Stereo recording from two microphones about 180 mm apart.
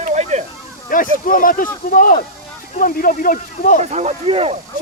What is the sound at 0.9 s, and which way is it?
Speech, 50° left (ahead or behind).